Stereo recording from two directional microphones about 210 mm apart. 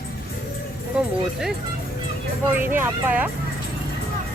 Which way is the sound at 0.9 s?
5° right (ahead or behind).